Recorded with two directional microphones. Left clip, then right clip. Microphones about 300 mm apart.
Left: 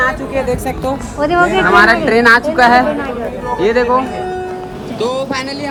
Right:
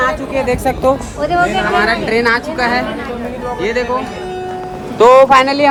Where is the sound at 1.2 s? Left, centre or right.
Left.